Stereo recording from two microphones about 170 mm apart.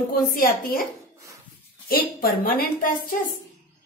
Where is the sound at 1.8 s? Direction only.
60° left (ahead or behind).